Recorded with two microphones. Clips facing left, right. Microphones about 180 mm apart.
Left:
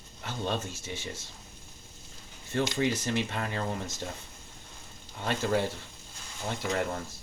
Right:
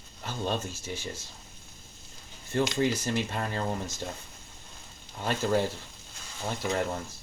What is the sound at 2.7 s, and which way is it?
Speech, 25° left (ahead or behind).